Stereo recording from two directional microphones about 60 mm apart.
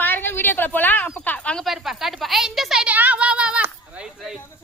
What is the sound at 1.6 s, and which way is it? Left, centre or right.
A woman's voice, centre.